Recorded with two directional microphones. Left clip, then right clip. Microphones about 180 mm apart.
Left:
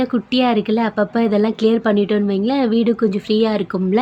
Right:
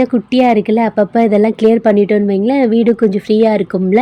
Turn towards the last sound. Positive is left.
turn(degrees=-15)  # may be behind; listen again after turning